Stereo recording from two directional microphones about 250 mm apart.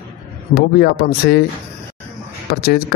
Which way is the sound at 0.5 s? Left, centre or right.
Left.